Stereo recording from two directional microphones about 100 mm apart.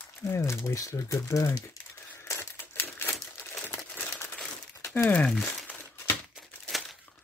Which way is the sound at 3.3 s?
20° left (ahead or behind).